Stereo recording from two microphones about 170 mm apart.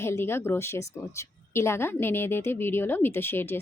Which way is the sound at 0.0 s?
15° left (ahead or behind).